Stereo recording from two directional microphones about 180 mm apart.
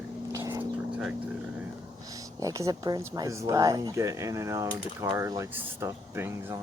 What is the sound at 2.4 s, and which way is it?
Speech, 20° right (ahead or behind).